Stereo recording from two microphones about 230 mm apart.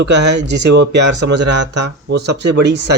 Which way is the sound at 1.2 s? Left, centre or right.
Right.